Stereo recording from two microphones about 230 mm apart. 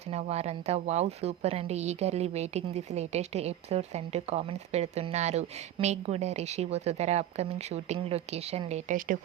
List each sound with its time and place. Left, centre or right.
0.1 s speech: right